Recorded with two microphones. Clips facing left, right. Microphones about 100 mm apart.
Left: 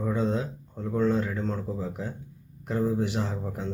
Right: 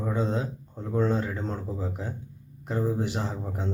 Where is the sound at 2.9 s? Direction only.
30° right (ahead or behind).